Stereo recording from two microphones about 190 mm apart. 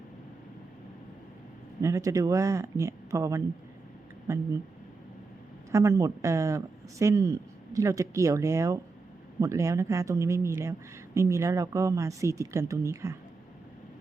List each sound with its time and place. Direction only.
1.8 s speech: 15° right (ahead or behind)
5.7 s speech: 15° right (ahead or behind)